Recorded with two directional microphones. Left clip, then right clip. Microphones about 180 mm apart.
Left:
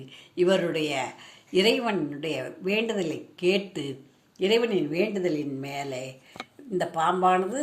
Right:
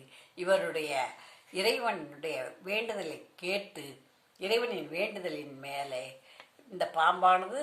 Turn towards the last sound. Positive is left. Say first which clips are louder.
# left 3 dB
turn(degrees=10)  # may be behind; listen again after turning